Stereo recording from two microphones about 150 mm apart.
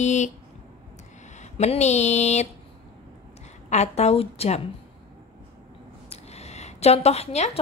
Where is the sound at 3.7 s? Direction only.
45° left (ahead or behind).